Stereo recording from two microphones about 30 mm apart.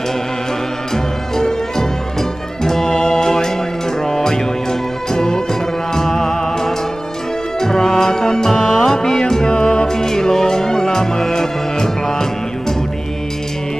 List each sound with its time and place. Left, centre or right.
1.4 s music: centre
9.5 s music: left
9.8 s music: centre